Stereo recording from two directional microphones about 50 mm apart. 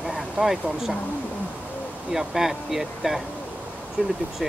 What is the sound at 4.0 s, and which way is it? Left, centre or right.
Speech, right.